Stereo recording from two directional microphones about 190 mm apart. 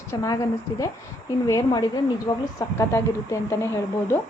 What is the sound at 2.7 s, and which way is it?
A woman's voice, 15° left (ahead or behind).